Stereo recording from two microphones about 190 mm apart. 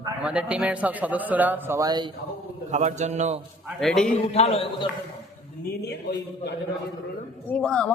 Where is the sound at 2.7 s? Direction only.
40° right (ahead or behind).